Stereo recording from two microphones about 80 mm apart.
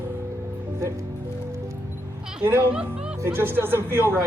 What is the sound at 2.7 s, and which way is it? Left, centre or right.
Music, centre.